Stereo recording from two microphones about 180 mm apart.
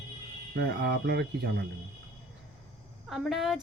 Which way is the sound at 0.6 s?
65° right (ahead or behind).